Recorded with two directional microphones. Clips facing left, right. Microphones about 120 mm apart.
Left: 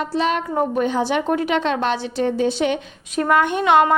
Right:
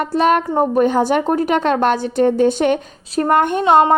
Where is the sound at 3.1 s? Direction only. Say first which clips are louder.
Right 3 dB; 35° right (ahead or behind).